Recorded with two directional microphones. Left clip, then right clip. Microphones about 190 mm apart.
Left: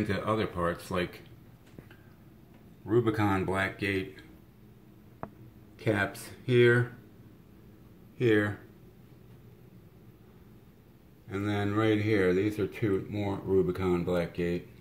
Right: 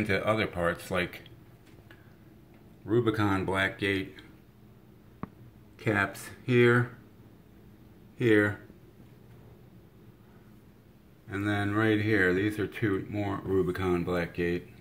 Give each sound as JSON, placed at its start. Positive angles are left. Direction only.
{"t": 0.0, "sound": "speech", "side_deg": -5}
{"t": 2.9, "sound": "speech", "side_deg": 0}
{"t": 5.8, "sound": "speech", "side_deg": 0}
{"t": 8.2, "sound": "speech", "side_deg": -15}
{"t": 11.2, "sound": "speech", "side_deg": -10}